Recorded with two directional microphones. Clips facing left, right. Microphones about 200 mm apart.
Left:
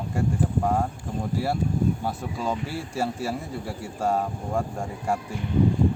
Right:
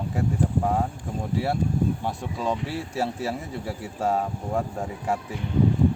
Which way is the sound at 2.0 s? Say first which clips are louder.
Right 1 dB; centre (ahead or behind).